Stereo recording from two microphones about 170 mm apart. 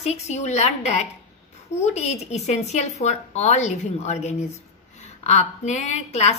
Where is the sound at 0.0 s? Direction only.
40° left (ahead or behind).